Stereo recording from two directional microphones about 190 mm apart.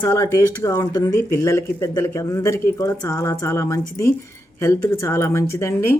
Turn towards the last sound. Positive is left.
turn(degrees=15)  # may be behind; listen again after turning